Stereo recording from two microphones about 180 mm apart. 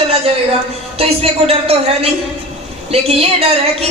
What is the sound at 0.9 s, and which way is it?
Speech, 35° right (ahead or behind).